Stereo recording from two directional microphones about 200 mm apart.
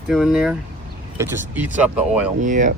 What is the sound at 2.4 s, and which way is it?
Speech, 40° right (ahead or behind).